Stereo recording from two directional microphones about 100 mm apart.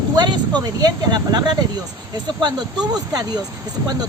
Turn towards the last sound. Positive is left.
turn(degrees=-40)  # may be behind; listen again after turning